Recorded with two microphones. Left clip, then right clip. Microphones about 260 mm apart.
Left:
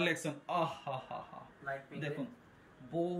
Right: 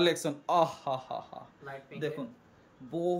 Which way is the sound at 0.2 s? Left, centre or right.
Centre.